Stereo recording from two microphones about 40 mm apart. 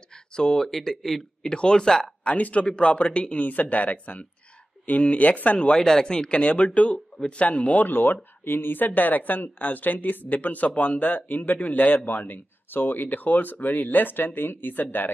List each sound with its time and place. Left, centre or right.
0.6 s speech: centre
1.4 s speech: left
2.2 s speech: left
2.6 s speech: left
3.4 s speech: left
5.8 s speech: centre; by 7.9 s left
7.9 s speech: left